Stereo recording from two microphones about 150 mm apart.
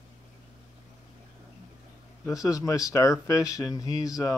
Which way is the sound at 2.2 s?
20° left (ahead or behind).